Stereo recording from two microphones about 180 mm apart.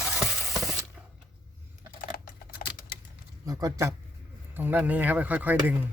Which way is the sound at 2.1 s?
55° left (ahead or behind).